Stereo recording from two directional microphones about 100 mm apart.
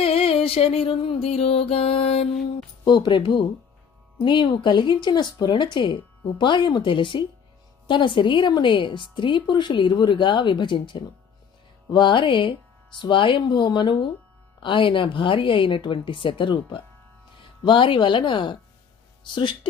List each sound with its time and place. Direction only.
0.0 s music: 70° left (ahead or behind)
2.8 s a woman's voice: 45° left (ahead or behind)